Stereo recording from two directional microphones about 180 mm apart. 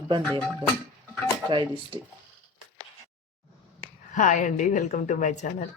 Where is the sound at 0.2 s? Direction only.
5° left (ahead or behind).